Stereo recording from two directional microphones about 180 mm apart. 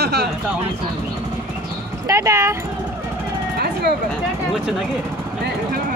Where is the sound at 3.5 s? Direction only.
60° right (ahead or behind).